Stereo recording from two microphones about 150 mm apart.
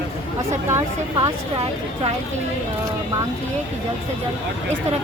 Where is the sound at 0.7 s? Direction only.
20° right (ahead or behind).